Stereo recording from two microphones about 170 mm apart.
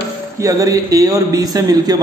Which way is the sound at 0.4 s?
20° right (ahead or behind).